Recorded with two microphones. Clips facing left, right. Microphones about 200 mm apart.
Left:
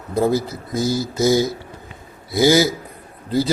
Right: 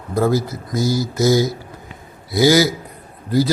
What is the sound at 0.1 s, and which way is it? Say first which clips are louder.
Speech: right 1 dB; 20° left (ahead or behind).